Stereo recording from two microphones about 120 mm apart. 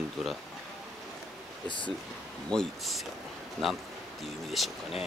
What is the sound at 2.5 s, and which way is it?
Speech, centre (ahead or behind).